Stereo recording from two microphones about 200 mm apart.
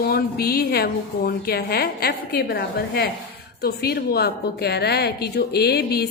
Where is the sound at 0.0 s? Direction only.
50° left (ahead or behind).